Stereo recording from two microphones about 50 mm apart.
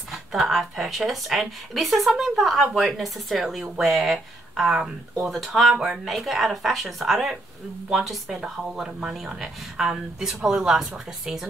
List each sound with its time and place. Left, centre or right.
0.1 s speech: centre
4.6 s speech: centre
5.2 s speech: centre